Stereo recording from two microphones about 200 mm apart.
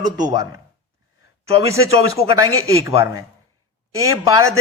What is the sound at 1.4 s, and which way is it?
A man's voice, 15° right (ahead or behind).